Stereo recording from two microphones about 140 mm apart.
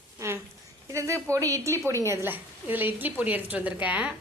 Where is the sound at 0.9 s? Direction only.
20° right (ahead or behind).